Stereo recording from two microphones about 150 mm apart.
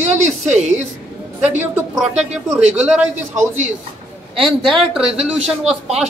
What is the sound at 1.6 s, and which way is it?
A man's voice, 15° right (ahead or behind).